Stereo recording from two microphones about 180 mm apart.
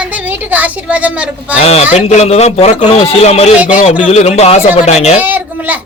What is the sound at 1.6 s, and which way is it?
A man's voice, 35° left (ahead or behind).